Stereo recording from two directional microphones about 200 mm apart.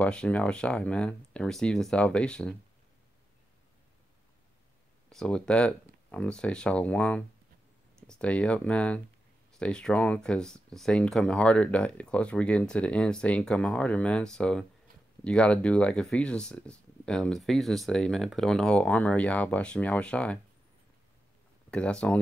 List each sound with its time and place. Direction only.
0.0 s speech: 5° left (ahead or behind)
5.1 s speech: 5° left (ahead or behind)
21.6 s speech: 5° left (ahead or behind)